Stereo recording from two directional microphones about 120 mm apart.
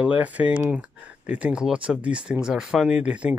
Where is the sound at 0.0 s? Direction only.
10° right (ahead or behind).